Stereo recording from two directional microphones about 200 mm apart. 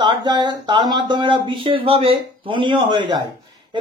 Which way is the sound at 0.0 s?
25° right (ahead or behind).